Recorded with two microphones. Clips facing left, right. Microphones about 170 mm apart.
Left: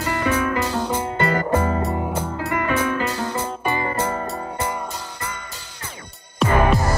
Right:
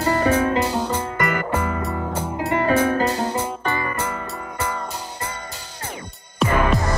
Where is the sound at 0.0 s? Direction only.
35° right (ahead or behind).